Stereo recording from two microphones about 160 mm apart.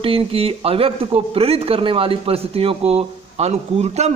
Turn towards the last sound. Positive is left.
turn(degrees=-45)  # may be behind; listen again after turning